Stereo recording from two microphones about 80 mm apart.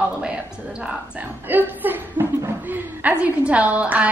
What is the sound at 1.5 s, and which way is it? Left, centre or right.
A woman's voice, right.